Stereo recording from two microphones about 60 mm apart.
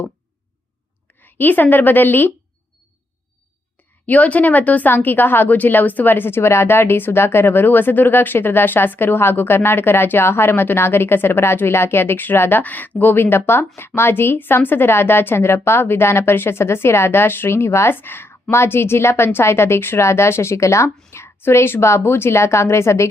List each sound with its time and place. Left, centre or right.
1.2 s speech: left
4.0 s a woman's voice: left